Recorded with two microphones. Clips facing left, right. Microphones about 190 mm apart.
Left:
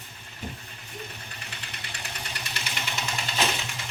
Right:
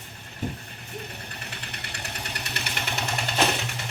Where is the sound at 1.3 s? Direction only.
55° right (ahead or behind).